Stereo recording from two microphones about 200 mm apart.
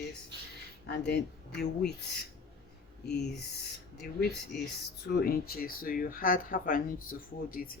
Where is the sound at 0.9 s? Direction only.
55° left (ahead or behind).